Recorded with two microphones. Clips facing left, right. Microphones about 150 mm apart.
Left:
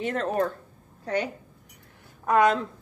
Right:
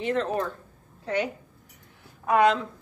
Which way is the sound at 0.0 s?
45° left (ahead or behind).